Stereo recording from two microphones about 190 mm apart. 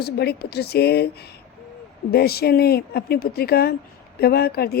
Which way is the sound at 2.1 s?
55° left (ahead or behind).